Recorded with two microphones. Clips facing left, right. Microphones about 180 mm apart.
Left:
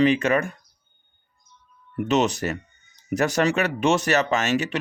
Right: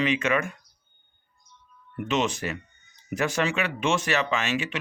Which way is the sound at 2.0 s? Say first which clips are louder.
Left 5 dB; 40° left (ahead or behind).